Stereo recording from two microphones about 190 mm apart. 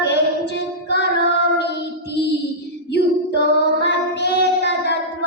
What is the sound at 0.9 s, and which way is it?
Child singing, 60° left (ahead or behind).